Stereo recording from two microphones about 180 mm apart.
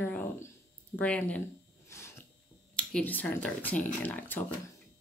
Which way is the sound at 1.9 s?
15° left (ahead or behind).